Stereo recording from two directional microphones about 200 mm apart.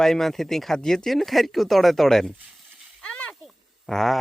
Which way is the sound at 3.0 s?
5° left (ahead or behind).